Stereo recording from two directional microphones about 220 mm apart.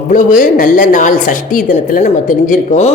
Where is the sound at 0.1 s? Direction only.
35° left (ahead or behind).